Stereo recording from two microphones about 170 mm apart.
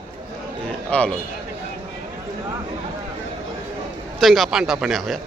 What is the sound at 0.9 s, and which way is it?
Speech, 5° left (ahead or behind).